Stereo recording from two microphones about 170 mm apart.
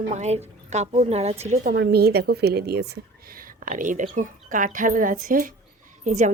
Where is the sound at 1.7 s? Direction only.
70° right (ahead or behind).